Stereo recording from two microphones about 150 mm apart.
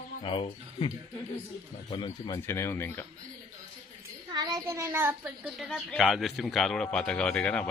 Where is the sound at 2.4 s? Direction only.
15° left (ahead or behind).